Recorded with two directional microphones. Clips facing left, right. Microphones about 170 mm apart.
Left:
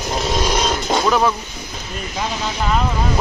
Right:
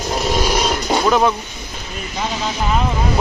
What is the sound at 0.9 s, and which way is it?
Speech, 5° right (ahead or behind).